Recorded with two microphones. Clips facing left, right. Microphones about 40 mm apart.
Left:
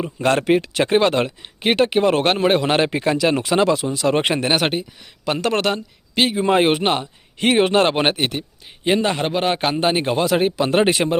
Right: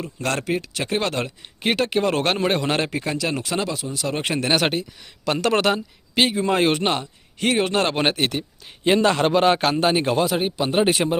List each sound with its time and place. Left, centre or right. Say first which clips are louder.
0.0 s speech: left 7 dB; left
0.4 s speech: left 8 dB; left; by 2.6 s centre
2.8 s speech: left 6 dB; left
3.6 s speech: left 8 dB; left
4.5 s speech: left 1 dB; centre
6.3 s speech: left 3 dB; left
7.3 s speech: left 5 dB; left
7.9 s a man's voice: left 2 dB; centre
9.8 s speech: left 2 dB; left
10.2 s speech: left 4 dB; left
10.8 s speech: left 2 dB; left